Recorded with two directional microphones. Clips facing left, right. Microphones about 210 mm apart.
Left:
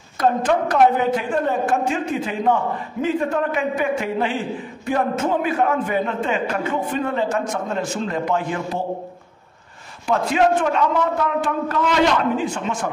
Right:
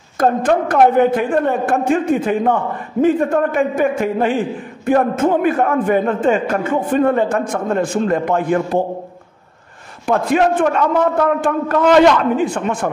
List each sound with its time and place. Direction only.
0.2 s a man's voice: 50° right (ahead or behind)
10.0 s a man's voice: 55° right (ahead or behind)